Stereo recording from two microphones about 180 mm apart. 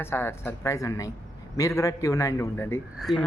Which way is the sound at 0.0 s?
15° left (ahead or behind).